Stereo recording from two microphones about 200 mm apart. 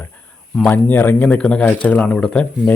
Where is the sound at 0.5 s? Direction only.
5° left (ahead or behind).